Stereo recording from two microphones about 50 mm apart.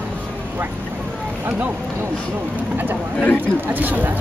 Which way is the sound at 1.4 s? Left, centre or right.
Right.